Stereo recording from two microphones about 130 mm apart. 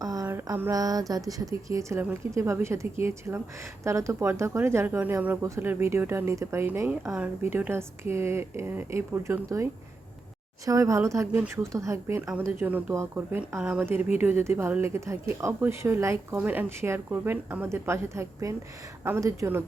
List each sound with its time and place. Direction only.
0.0 s a sound: 25° right (ahead or behind)
0.7 s speech: 30° right (ahead or behind)
10.7 s speech: 25° right (ahead or behind)